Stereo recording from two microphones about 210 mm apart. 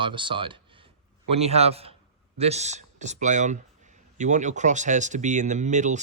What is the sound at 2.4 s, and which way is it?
Speech, 30° right (ahead or behind).